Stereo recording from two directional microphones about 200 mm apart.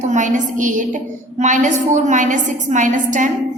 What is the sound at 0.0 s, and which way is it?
A woman's voice, 35° right (ahead or behind).